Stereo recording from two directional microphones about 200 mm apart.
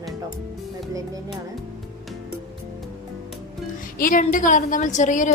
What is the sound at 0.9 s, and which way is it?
Music, 15° right (ahead or behind).